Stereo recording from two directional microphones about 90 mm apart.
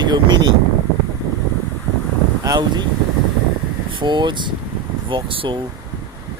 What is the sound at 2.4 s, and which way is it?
Speech, 50° right (ahead or behind).